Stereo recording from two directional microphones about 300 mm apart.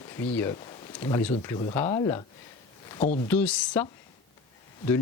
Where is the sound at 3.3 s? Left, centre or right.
Centre.